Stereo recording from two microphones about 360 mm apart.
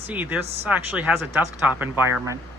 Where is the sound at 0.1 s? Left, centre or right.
Centre.